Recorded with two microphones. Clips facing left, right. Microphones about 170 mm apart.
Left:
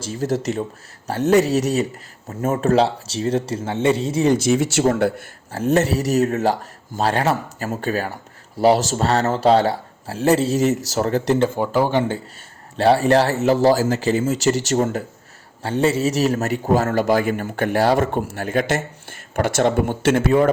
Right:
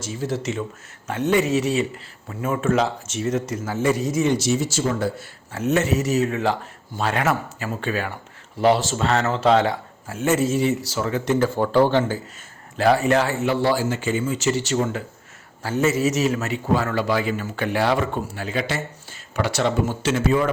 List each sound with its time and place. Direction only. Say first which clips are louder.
0.0 s speech: left 4 dB; 40° left (ahead or behind)
4.4 s speech: left 4 dB; 55° left (ahead or behind)
5.5 s speech: left 3 dB; 35° left (ahead or behind)
11.3 s speech: even; 20° left (ahead or behind)
12.7 s speech: left 3 dB; 30° left (ahead or behind)
15.6 s a man's voice: left 2 dB; 30° left (ahead or behind); by 20.5 s 55° left (ahead or behind)